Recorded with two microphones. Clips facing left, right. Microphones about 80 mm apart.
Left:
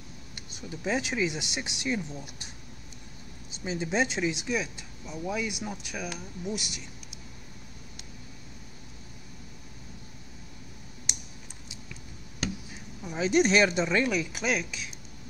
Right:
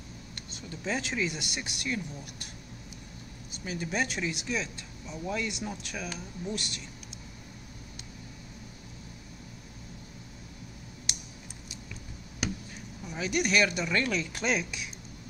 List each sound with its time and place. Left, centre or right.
0.5 s speech: centre
3.6 s speech: left
13.2 s speech: left; by 14.9 s centre